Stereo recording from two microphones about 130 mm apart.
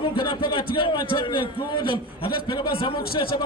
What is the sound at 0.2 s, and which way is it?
A man's voice, 40° left (ahead or behind).